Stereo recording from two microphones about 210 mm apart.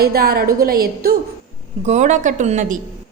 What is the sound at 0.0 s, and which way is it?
A woman's voice, 45° right (ahead or behind).